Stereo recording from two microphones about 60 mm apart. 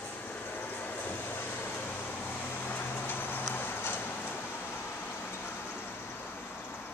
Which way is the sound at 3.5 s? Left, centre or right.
Left.